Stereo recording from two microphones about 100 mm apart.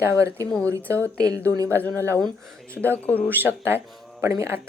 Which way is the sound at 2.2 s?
15° left (ahead or behind).